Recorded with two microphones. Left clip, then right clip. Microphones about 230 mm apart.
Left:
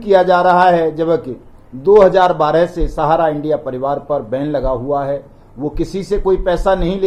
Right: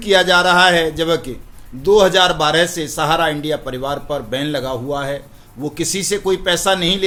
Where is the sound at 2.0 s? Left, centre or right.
Right.